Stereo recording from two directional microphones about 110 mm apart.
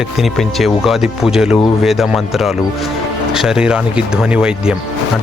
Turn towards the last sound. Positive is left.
turn(degrees=-10)  # may be behind; listen again after turning